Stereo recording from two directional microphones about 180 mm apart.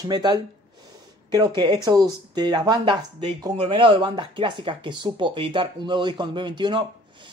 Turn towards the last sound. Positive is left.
turn(degrees=-25)  # may be behind; listen again after turning